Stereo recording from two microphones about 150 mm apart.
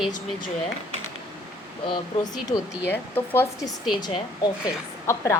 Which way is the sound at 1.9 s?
25° left (ahead or behind).